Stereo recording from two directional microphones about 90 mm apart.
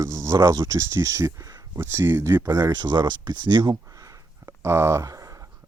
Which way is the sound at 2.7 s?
55° right (ahead or behind).